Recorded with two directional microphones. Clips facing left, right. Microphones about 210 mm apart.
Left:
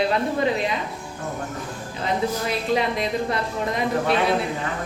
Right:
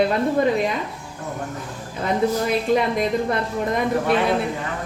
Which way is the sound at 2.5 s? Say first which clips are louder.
Right 3 dB; 50° right (ahead or behind).